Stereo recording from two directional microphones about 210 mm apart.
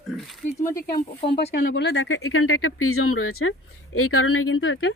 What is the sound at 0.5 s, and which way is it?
Speech, 15° left (ahead or behind).